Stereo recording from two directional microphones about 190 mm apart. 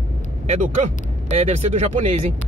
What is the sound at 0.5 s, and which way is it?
Speech, 35° right (ahead or behind).